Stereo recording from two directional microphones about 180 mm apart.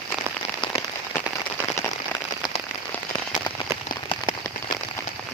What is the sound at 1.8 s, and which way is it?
Rain on surface, 15° left (ahead or behind).